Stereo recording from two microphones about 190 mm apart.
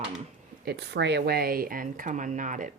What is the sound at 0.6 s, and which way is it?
Speech, 60° right (ahead or behind).